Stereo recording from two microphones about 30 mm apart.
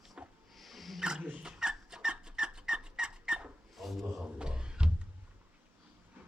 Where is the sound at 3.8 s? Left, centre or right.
Centre.